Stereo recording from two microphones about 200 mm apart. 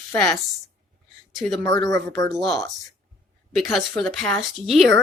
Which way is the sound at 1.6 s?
20° left (ahead or behind).